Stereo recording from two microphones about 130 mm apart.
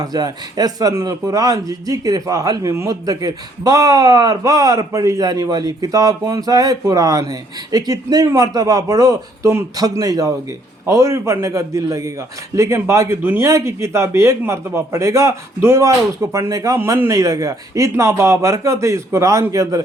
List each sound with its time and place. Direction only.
0.0 s a man's voice: 30° right (ahead or behind)